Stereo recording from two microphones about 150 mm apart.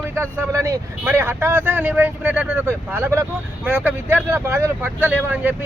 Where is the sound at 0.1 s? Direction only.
20° right (ahead or behind).